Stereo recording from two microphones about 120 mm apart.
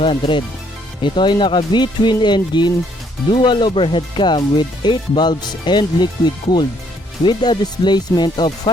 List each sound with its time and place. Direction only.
0.0 s speech: 45° left (ahead or behind)